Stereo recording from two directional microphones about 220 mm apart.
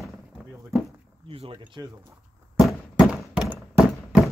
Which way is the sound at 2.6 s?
Centre (ahead or behind).